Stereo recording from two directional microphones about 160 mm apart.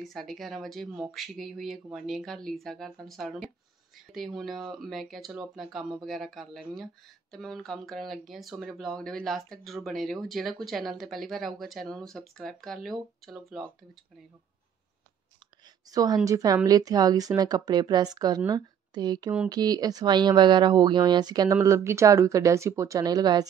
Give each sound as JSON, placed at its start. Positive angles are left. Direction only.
{"t": 0.0, "sound": "speech", "side_deg": 0}
{"t": 15.9, "sound": "a woman's voice", "side_deg": -25}